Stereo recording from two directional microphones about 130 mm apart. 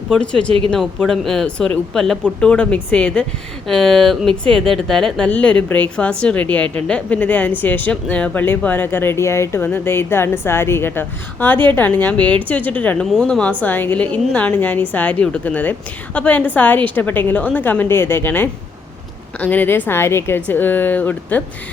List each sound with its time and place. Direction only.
0.1 s a woman's voice: 5° left (ahead or behind)